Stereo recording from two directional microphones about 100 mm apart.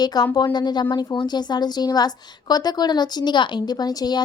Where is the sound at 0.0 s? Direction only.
40° left (ahead or behind).